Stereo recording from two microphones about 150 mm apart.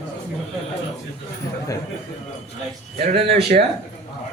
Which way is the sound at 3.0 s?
50° right (ahead or behind).